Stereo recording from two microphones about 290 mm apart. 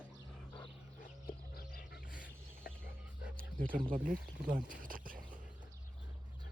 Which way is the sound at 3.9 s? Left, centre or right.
Right.